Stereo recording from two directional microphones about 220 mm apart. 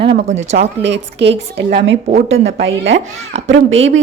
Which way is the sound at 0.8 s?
50° right (ahead or behind).